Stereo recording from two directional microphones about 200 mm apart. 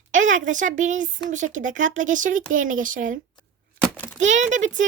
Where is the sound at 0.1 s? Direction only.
40° right (ahead or behind).